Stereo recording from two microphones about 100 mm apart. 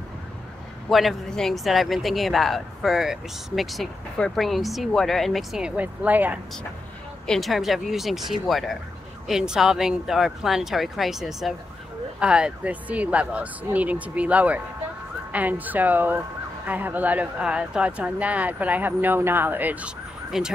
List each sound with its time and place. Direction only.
0.8 s speech: centre (ahead or behind)
5.8 s speech: 15° right (ahead or behind)
7.2 s speech: centre (ahead or behind)